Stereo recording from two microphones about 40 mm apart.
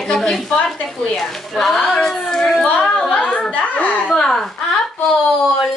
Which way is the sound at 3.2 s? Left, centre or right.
Left.